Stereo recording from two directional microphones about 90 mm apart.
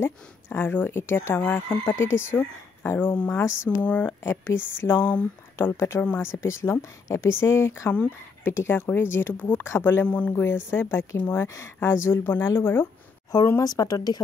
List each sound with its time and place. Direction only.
0.0 s speech: 25° left (ahead or behind)
10.0 s speech: 15° left (ahead or behind)
10.3 s speech: 25° left (ahead or behind)
13.5 s speech: 40° left (ahead or behind)